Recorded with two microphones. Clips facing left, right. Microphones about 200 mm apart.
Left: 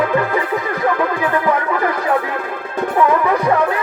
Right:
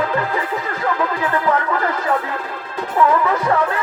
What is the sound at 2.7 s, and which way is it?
Music, 55° left (ahead or behind).